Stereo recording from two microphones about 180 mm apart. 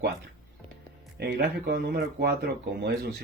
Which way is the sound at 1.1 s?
65° right (ahead or behind).